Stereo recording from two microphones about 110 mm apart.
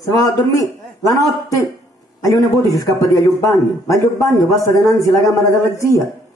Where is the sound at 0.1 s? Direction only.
35° left (ahead or behind).